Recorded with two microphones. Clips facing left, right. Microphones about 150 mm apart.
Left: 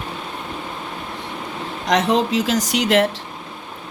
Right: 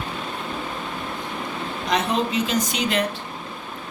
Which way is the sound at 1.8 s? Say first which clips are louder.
Left 5 dB; 90° left.